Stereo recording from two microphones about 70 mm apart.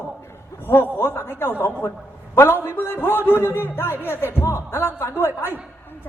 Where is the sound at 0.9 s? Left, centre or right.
Left.